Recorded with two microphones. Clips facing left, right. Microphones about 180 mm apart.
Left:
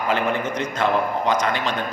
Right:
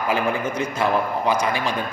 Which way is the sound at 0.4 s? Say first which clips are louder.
Even; 10° right (ahead or behind).